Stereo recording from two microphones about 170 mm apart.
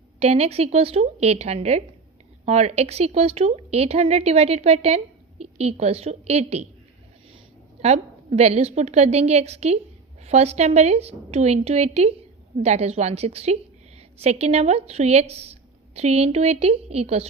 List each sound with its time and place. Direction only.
0.2 s a woman's voice: 40° right (ahead or behind)
7.8 s a woman's voice: 40° right (ahead or behind)